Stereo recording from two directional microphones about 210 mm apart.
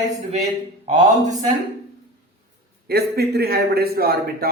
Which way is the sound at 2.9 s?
50° right (ahead or behind).